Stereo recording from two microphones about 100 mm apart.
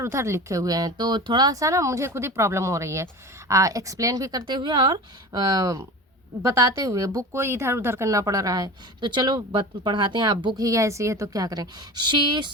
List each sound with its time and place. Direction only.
0.0 s speech: 30° right (ahead or behind)
4.4 s speech: 50° right (ahead or behind)
10.7 s speech: 30° right (ahead or behind); by 12.5 s 50° right (ahead or behind)